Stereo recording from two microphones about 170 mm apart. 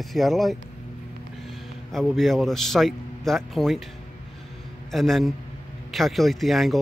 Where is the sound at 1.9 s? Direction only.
Centre (ahead or behind).